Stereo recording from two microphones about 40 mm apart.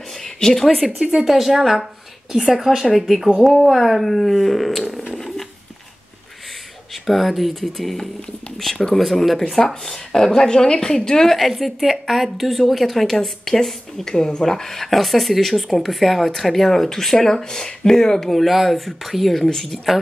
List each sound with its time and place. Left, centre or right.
0.1 s a sound: centre
0.8 s a woman's voice: centre
5.1 s a sound: centre
6.9 s speech: centre
11.3 s speech: centre
18.3 s speech: centre